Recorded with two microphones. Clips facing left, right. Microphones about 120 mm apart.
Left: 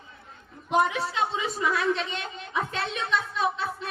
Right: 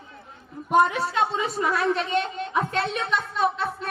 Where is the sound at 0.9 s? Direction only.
50° right (ahead or behind).